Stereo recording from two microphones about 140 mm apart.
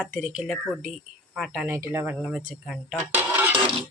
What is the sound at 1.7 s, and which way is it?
Speech, 20° right (ahead or behind).